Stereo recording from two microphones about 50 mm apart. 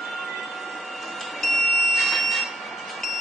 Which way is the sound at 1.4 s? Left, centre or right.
Centre.